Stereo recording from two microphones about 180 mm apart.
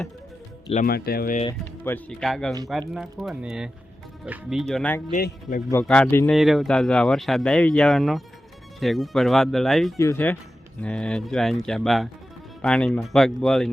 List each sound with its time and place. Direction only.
0.9 s speech: 60° left (ahead or behind)
1.8 s speech: 10° left (ahead or behind)
4.7 s speech: 10° left (ahead or behind)
5.1 s a man's voice: 45° left (ahead or behind)
5.8 s speech: 5° left (ahead or behind)
10.0 s speech: 15° left (ahead or behind)